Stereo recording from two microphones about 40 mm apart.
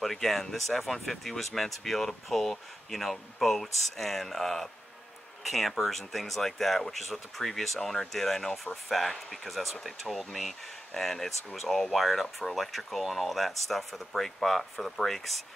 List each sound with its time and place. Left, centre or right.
0.0 s speech: centre